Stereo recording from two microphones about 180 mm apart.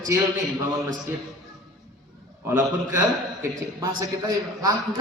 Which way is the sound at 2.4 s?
15° right (ahead or behind).